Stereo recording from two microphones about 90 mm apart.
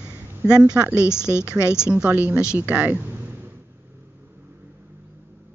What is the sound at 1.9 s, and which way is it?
A woman's voice, 15° right (ahead or behind).